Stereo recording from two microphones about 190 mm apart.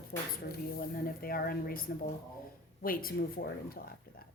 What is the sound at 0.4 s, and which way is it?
Speech, 50° left (ahead or behind).